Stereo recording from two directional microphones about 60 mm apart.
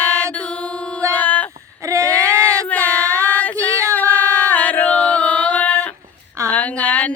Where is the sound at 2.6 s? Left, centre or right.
Left.